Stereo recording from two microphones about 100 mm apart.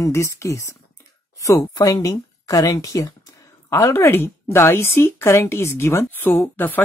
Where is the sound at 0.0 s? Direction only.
30° left (ahead or behind).